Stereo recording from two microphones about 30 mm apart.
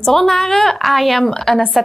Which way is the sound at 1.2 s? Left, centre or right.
Centre.